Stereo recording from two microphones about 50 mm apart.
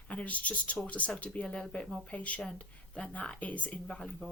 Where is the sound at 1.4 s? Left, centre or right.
Centre.